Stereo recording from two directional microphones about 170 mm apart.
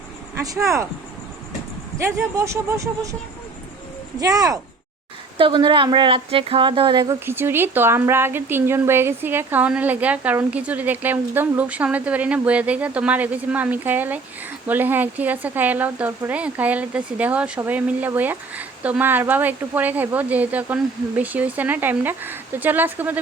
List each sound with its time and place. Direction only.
0.6 s speech: 15° right (ahead or behind)
2.0 s speech: 15° right (ahead or behind)
4.2 s a woman's voice: 20° right (ahead or behind)
7.3 s speech: 15° right (ahead or behind)